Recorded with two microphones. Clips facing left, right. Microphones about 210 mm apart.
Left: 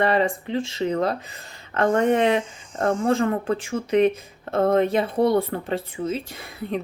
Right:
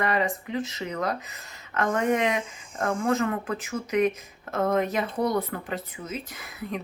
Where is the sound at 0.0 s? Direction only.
30° left (ahead or behind).